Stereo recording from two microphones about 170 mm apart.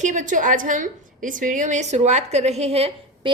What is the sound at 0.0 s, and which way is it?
A woman's voice, 45° right (ahead or behind).